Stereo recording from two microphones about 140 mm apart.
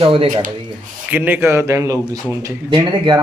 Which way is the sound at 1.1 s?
15° right (ahead or behind).